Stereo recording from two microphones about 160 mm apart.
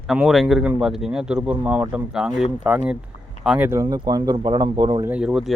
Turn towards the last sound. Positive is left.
turn(degrees=-5)  # may be behind; listen again after turning